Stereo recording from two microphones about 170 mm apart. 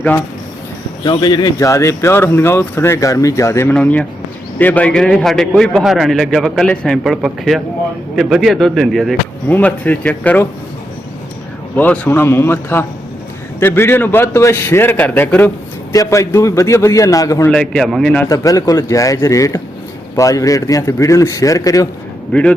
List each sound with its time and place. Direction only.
1.0 s a man's voice: 25° left (ahead or behind)
11.8 s a man's voice: 10° left (ahead or behind)
17.5 s a man's voice: 5° left (ahead or behind)
18.3 s a man's voice: 20° left (ahead or behind)
22.3 s a man's voice: 5° left (ahead or behind)